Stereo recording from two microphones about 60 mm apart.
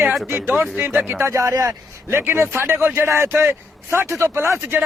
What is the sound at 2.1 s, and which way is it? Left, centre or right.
A man's voice, right.